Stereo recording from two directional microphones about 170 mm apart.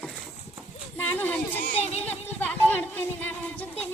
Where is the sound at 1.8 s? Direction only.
40° left (ahead or behind).